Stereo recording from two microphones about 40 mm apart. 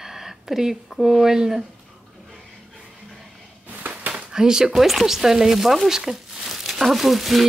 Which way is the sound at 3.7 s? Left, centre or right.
Right.